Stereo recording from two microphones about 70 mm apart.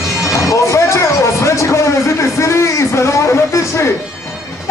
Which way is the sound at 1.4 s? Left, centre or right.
Left.